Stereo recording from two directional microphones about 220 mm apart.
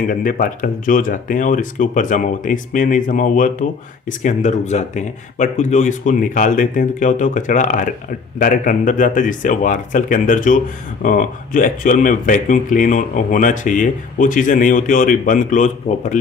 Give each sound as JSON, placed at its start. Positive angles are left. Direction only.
{"t": 0.1, "sound": "speech", "side_deg": 40}